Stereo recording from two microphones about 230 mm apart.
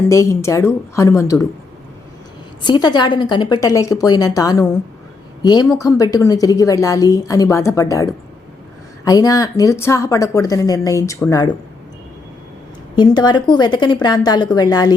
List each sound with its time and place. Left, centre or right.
0.1 s a woman's voice: centre
2.6 s a woman's voice: centre
13.0 s a woman's voice: centre